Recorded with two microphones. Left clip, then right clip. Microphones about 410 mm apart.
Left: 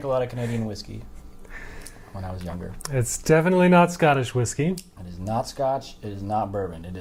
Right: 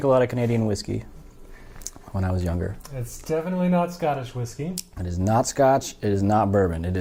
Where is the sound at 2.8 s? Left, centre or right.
Left.